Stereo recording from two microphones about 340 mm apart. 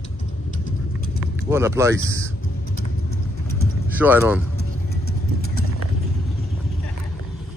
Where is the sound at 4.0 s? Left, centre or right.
Centre.